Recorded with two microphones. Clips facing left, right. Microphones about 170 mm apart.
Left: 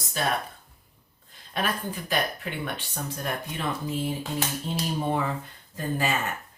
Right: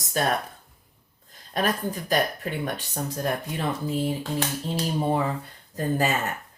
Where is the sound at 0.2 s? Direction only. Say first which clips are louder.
Right 3 dB; 45° right (ahead or behind).